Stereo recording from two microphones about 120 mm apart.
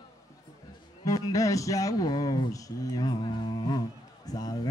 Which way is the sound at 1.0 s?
30° left (ahead or behind).